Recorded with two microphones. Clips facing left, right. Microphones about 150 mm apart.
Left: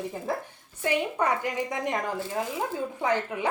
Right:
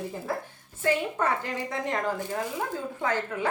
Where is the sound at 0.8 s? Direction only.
15° left (ahead or behind).